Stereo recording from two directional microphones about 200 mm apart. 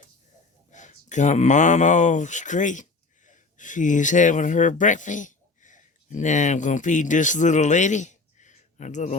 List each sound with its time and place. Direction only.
0.7 s speech: 35° left (ahead or behind)